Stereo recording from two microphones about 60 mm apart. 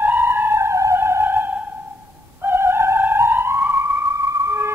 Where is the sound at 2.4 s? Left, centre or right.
Right.